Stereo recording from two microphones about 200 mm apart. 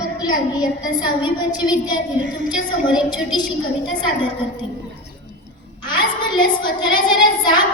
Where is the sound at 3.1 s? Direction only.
20° left (ahead or behind).